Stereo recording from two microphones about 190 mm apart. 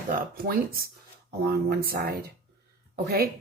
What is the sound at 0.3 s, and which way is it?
A woman's voice, 50° right (ahead or behind).